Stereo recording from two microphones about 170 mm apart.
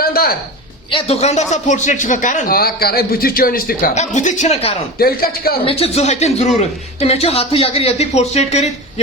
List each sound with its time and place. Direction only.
0.0 s a sound: 60° left (ahead or behind)
0.9 s a man's voice: 35° left (ahead or behind); by 3.9 s 60° left (ahead or behind)
3.9 s a man's voice: 45° left (ahead or behind)
4.9 s a man's voice: 60° left (ahead or behind)
5.6 s speech: 35° left (ahead or behind)